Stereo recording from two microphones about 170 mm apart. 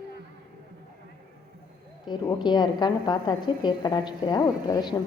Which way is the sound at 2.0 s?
25° left (ahead or behind).